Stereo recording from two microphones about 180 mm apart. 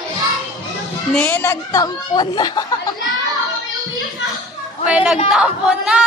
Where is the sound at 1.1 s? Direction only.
10° left (ahead or behind).